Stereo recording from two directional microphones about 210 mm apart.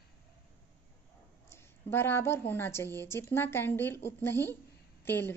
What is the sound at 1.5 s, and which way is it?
A woman's voice, 10° left (ahead or behind).